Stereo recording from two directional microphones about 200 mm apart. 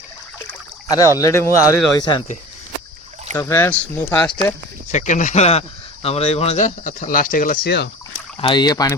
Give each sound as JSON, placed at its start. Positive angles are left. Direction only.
{"t": 0.9, "sound": "speech", "side_deg": 20}
{"t": 3.3, "sound": "speech", "side_deg": 10}
{"t": 4.2, "sound": "speech", "side_deg": 25}
{"t": 4.9, "sound": "speech", "side_deg": 40}
{"t": 8.4, "sound": "speech", "side_deg": 25}